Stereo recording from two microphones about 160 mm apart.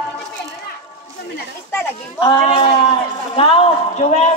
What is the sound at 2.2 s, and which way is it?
A man's voice, 35° left (ahead or behind).